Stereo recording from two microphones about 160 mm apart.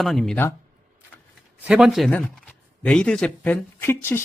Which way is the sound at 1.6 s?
5° right (ahead or behind).